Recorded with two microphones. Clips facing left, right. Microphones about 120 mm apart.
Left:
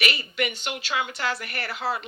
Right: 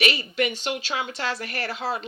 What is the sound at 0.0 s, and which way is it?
Speech, 30° right (ahead or behind).